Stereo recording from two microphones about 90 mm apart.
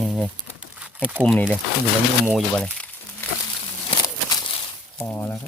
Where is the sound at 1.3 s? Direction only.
15° left (ahead or behind).